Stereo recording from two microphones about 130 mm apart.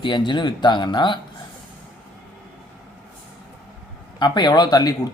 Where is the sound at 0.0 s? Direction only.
35° left (ahead or behind).